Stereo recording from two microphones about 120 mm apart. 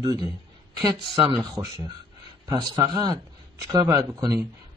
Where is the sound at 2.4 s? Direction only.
35° right (ahead or behind).